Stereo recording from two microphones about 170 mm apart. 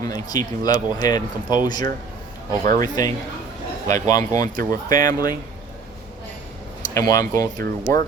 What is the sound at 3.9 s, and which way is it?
Speech, 20° left (ahead or behind).